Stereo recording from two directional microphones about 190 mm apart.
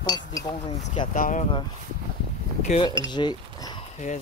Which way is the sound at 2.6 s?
35° left (ahead or behind).